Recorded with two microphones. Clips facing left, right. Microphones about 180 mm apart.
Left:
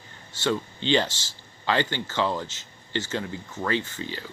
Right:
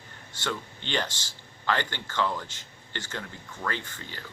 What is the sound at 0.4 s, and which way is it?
Speech, 20° left (ahead or behind).